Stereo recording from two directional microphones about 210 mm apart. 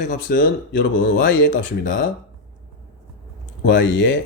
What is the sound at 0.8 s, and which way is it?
Speech, 60° left (ahead or behind).